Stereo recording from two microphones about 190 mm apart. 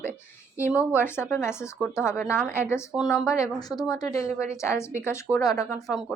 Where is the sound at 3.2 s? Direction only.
15° left (ahead or behind).